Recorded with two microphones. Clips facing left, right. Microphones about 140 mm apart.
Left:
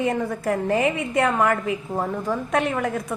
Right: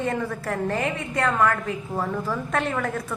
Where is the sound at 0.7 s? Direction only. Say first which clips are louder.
Left 5 dB; 20° left (ahead or behind).